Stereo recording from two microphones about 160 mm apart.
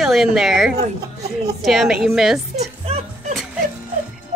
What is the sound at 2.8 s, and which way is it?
Music, 40° right (ahead or behind).